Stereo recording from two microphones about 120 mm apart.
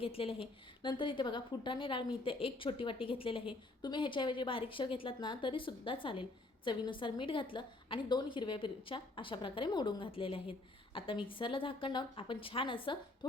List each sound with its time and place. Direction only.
0.0 s a woman's voice: 50° left (ahead or behind)